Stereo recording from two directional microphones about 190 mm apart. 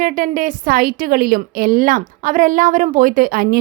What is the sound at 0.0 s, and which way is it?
A woman's voice, 45° right (ahead or behind).